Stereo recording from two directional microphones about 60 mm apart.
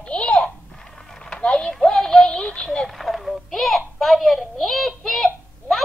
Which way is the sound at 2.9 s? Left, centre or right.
Centre.